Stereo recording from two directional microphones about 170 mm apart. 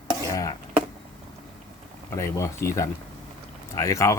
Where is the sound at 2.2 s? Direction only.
15° left (ahead or behind).